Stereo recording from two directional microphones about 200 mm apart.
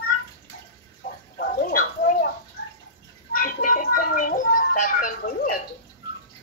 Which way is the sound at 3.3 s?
45° left (ahead or behind).